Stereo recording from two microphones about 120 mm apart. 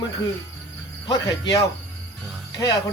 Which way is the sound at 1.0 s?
35° left (ahead or behind).